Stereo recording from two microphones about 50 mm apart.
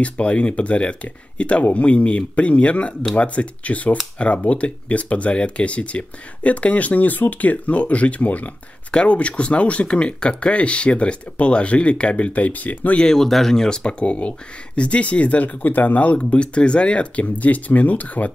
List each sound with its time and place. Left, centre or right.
0.0 s speech: left
13.0 s speech: centre; by 18.3 s left